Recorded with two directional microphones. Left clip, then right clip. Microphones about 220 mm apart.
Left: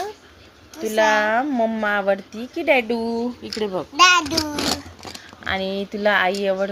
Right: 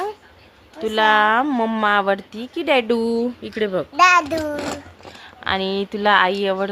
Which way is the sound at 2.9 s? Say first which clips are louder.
Right 4 dB; 30° right (ahead or behind).